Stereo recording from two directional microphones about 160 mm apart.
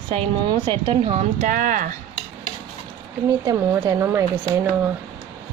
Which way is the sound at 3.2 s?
20° right (ahead or behind).